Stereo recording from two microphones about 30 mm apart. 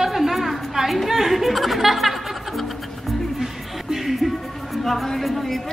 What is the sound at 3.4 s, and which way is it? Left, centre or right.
Music, centre.